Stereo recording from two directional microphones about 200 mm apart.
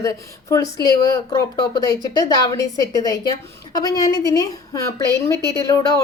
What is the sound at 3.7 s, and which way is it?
Speech, 20° left (ahead or behind).